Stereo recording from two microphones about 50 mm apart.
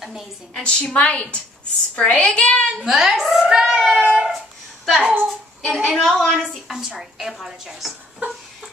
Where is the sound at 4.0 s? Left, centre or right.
Centre.